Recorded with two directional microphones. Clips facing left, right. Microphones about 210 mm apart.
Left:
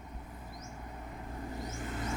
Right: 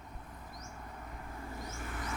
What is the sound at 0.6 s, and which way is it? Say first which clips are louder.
Vehicle: left 2 dB; 15° left (ahead or behind).